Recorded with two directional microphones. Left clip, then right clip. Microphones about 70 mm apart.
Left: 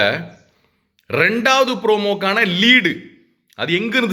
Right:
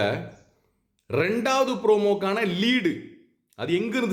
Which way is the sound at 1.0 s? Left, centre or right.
Right.